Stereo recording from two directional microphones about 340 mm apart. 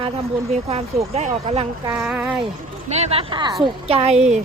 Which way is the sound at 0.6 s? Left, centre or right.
Centre.